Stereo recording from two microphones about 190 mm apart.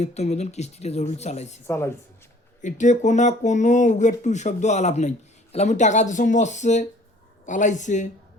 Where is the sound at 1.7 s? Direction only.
15° left (ahead or behind).